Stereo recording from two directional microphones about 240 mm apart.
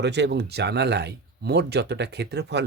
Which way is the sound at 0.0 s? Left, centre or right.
Right.